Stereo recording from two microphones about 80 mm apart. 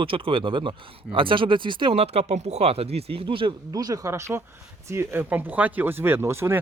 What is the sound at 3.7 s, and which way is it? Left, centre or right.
Speech, right.